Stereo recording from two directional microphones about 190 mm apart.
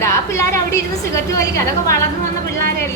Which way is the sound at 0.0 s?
15° left (ahead or behind).